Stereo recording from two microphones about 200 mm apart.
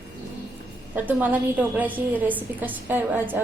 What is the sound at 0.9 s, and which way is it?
A woman's voice, 10° right (ahead or behind).